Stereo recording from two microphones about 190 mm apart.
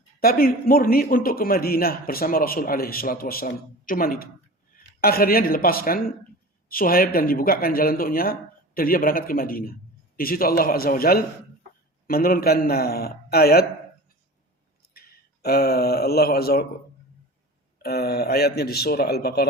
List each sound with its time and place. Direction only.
0.2 s a man's voice: 50° left (ahead or behind)
14.8 s speech: 55° left (ahead or behind)
17.8 s a man's voice: 55° left (ahead or behind)